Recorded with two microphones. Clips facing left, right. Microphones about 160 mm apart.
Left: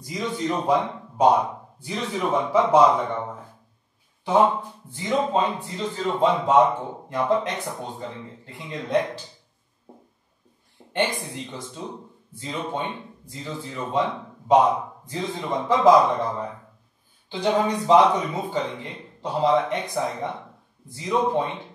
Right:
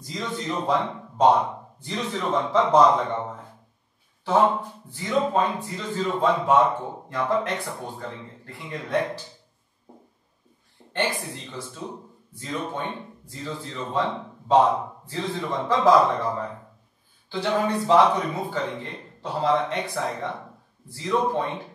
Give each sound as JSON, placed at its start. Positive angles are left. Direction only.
{"t": 0.0, "sound": "speech", "side_deg": 15}
{"t": 4.2, "sound": "speech", "side_deg": 15}
{"t": 10.9, "sound": "speech", "side_deg": 15}